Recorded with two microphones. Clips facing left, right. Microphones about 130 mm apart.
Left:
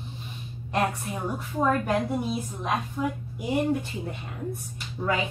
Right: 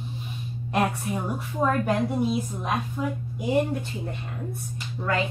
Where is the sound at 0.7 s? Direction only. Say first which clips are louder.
Right 2 dB; 5° right (ahead or behind).